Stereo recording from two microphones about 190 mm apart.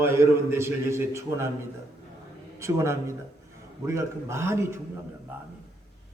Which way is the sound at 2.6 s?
15° right (ahead or behind).